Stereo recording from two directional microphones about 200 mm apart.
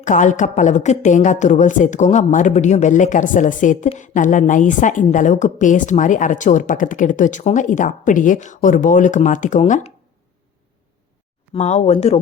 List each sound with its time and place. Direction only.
0.0 s a woman's voice: 40° left (ahead or behind)
11.5 s a woman's voice: 35° left (ahead or behind)